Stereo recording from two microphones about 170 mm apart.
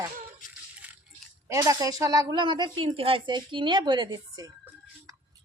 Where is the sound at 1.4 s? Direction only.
20° right (ahead or behind).